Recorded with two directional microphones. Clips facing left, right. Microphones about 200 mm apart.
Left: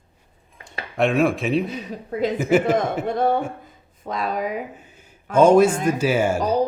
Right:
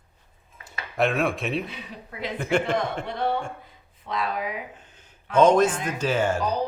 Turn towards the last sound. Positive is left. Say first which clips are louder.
# left 5 dB
turn(degrees=45)  # may be behind; listen again after turning